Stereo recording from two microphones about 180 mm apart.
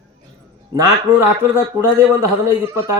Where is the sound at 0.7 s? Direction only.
15° right (ahead or behind).